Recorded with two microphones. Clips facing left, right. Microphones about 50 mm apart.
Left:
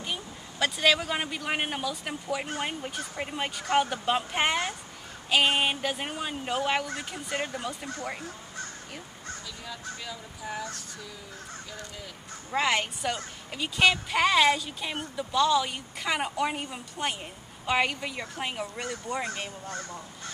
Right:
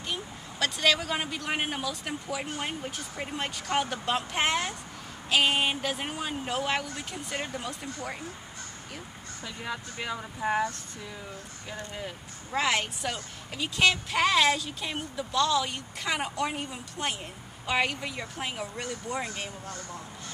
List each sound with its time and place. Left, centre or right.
0.0 s speech: centre
9.7 s speech: right
12.4 s speech: centre